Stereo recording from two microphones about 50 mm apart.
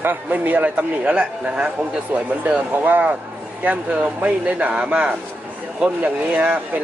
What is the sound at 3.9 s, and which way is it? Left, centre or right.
A man's voice, right.